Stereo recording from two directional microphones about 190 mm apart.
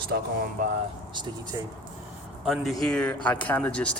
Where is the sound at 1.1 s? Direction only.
20° right (ahead or behind).